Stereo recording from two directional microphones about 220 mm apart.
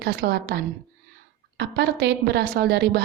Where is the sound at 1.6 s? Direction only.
50° right (ahead or behind).